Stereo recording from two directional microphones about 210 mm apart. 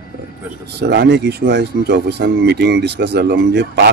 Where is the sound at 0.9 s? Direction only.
55° right (ahead or behind).